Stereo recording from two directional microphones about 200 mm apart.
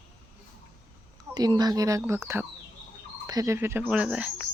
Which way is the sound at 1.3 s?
20° right (ahead or behind).